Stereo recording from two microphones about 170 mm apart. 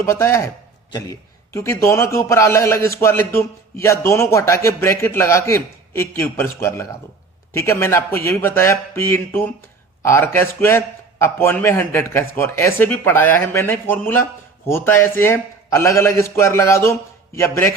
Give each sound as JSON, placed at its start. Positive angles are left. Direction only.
{"t": 0.0, "sound": "speech", "side_deg": 15}
{"t": 1.5, "sound": "speech", "side_deg": 15}